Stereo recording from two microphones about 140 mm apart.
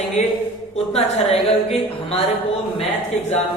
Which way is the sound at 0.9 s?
50° left (ahead or behind).